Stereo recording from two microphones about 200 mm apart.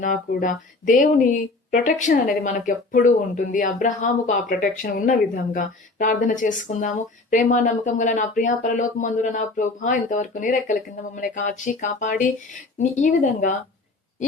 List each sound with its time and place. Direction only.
0.0 s speech: 40° left (ahead or behind)